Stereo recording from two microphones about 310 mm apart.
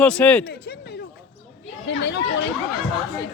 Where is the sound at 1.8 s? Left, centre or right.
Left.